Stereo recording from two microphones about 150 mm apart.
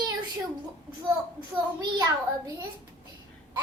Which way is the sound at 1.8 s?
30° right (ahead or behind).